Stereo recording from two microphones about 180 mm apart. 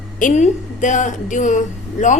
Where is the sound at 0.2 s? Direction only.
45° left (ahead or behind).